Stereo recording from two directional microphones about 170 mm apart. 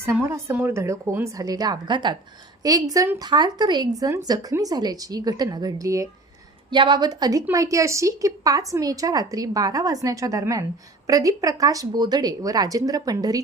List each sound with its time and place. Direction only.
0.0 s a woman's voice: 15° right (ahead or behind)